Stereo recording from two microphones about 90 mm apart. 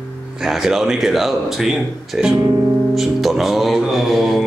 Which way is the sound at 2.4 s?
45° right (ahead or behind).